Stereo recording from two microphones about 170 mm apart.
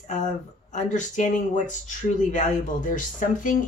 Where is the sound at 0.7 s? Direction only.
45° left (ahead or behind).